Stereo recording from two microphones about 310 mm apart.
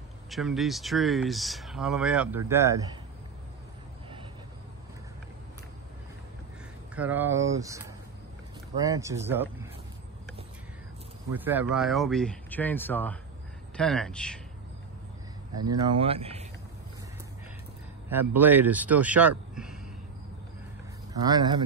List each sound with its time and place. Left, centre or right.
0.3 s speech: centre
7.0 s speech: centre
11.3 s speech: centre
15.6 s speech: centre
18.3 s speech: centre
21.1 s speech: centre